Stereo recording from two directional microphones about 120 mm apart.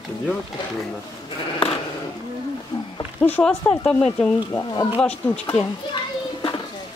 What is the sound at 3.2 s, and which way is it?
Speech, 15° left (ahead or behind).